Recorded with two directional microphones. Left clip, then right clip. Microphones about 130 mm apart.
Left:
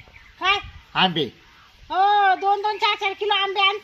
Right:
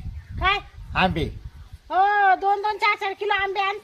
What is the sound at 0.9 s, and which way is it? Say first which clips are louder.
Speech: left 2 dB; 45° right (ahead or behind).